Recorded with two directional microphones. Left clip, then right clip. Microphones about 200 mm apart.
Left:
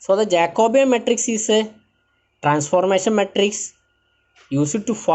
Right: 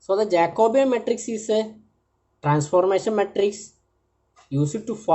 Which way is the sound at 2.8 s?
20° left (ahead or behind).